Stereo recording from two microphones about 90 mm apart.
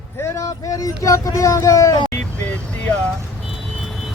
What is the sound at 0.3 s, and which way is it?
Speech, 40° left (ahead or behind).